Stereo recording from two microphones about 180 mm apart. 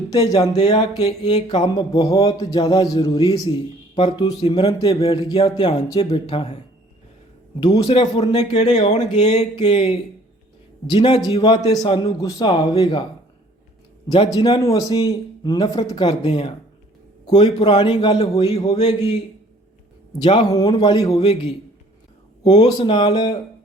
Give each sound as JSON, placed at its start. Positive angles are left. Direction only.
{"t": 0.1, "sound": "a man's voice", "side_deg": 20}
{"t": 2.2, "sound": "a man's voice", "side_deg": 20}
{"t": 3.9, "sound": "speech", "side_deg": 35}
{"t": 4.5, "sound": "a man's voice", "side_deg": 25}
{"t": 7.6, "sound": "a man's voice", "side_deg": 25}
{"t": 14.3, "sound": "a man's voice", "side_deg": 30}
{"t": 18.4, "sound": "speech", "side_deg": 35}
{"t": 20.2, "sound": "a man's voice", "side_deg": 25}
{"t": 21.1, "sound": "speech", "side_deg": 35}
{"t": 22.4, "sound": "a man's voice", "side_deg": 25}